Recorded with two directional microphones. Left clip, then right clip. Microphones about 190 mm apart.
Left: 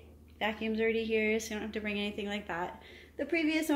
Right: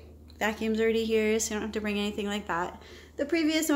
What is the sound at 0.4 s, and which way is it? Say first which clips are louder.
A woman's voice: right 4 dB; 10° right (ahead or behind).